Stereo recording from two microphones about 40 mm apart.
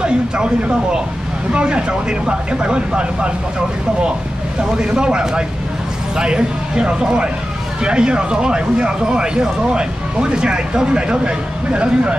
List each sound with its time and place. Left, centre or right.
0.0 s speech: right
4.6 s speech: right